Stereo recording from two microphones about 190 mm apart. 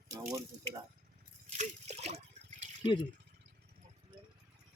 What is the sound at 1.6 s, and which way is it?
Water, 35° right (ahead or behind).